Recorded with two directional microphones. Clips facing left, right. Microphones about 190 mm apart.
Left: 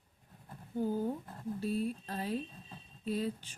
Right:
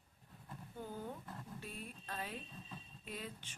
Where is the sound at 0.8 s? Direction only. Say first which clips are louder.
Left 13 dB; 40° left (ahead or behind).